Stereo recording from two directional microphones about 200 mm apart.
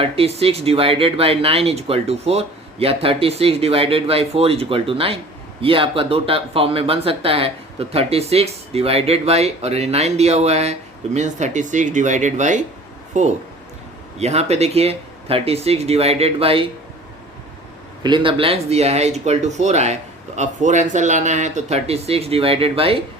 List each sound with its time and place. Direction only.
0.0 s speech: 30° right (ahead or behind)
18.0 s speech: 25° right (ahead or behind)